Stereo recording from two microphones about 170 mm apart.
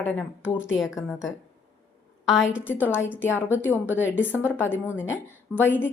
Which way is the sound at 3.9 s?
10° left (ahead or behind).